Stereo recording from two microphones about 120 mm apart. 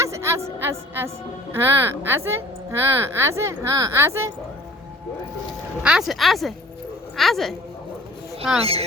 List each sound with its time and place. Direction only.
0.0 s music: 25° right (ahead or behind)
1.5 s a woman's voice: 20° right (ahead or behind)
5.8 s speech: 5° right (ahead or behind)